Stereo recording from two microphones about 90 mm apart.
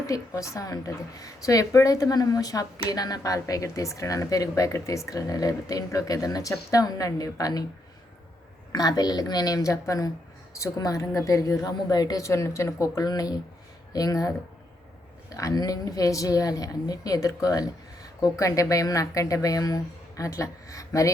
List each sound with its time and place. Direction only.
0.1 s a woman's voice: 35° left (ahead or behind)
8.7 s a woman's voice: 50° left (ahead or behind)
15.4 s a woman's voice: 40° left (ahead or behind)